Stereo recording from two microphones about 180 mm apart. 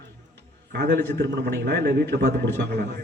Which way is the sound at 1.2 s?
70° right (ahead or behind).